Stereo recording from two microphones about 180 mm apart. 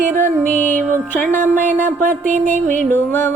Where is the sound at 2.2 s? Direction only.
45° right (ahead or behind).